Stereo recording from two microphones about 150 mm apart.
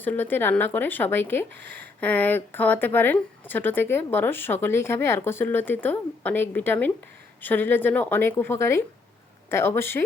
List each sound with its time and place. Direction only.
0.0 s speech: 10° left (ahead or behind)